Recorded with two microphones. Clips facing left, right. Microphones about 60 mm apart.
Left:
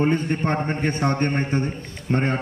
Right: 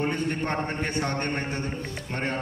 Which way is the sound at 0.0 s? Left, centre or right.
Left.